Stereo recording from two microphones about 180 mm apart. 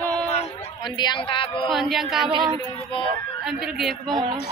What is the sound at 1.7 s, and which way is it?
Speech, centre (ahead or behind).